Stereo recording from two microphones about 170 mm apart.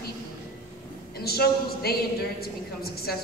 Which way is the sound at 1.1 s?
65° left (ahead or behind).